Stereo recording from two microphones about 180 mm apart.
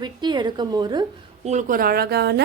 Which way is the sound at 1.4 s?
40° right (ahead or behind).